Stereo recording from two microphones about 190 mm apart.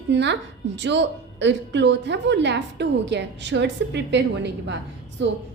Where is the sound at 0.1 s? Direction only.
65° right (ahead or behind).